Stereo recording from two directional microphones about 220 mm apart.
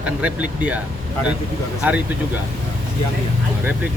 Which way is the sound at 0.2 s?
5° right (ahead or behind).